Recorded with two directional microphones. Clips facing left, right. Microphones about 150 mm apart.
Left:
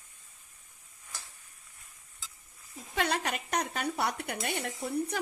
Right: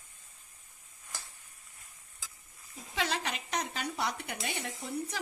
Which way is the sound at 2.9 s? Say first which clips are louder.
Left 3 dB; 55° left (ahead or behind).